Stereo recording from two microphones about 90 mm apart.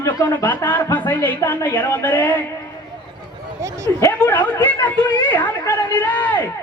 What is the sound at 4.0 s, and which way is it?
A woman's voice, 20° left (ahead or behind).